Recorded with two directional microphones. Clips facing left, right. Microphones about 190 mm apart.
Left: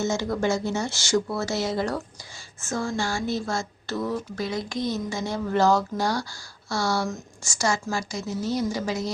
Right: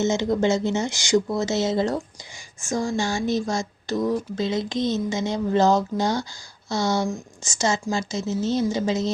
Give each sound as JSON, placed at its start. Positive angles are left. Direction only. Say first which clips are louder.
{"t": 0.0, "sound": "speech", "louder": "right 4 dB", "side_deg": -20}